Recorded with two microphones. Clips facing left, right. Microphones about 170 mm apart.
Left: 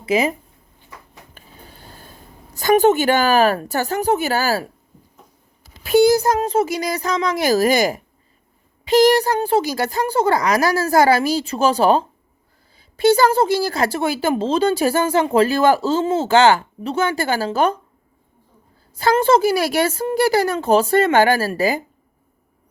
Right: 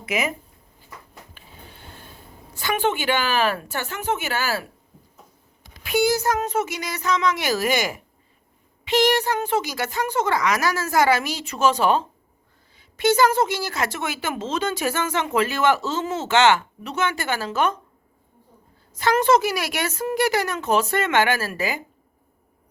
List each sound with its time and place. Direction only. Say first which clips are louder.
0.0 s speech: left 7 dB; 30° left (ahead or behind)
1.3 s a sound: left 2 dB; 40° left (ahead or behind)
2.6 s speech: left 9 dB; 40° left (ahead or behind)
5.7 s speech: left 7 dB; 40° left (ahead or behind)
18.9 s speech: left 3 dB; 30° left (ahead or behind)